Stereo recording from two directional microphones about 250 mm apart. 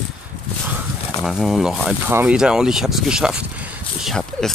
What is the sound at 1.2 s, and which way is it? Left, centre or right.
Speech, centre.